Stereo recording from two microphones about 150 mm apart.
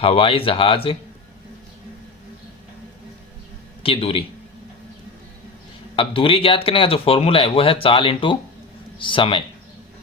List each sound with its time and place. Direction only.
0.0 s speech: 40° left (ahead or behind)
3.8 s speech: 40° left (ahead or behind)
6.0 s speech: 35° left (ahead or behind)